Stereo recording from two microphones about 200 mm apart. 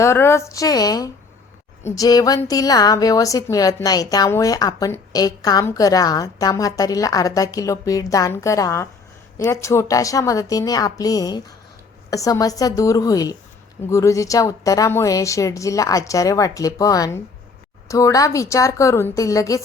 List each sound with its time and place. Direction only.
0.0 s a woman's voice: 15° left (ahead or behind)